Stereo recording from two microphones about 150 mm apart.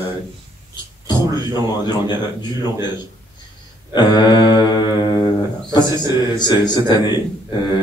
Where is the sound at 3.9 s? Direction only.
30° left (ahead or behind).